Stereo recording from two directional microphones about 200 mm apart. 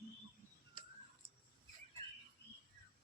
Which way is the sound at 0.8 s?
25° right (ahead or behind).